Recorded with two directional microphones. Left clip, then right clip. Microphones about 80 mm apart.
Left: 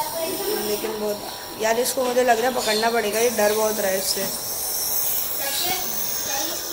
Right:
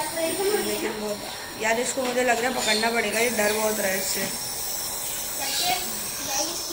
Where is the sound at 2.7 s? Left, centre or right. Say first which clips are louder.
Left 2 dB; centre.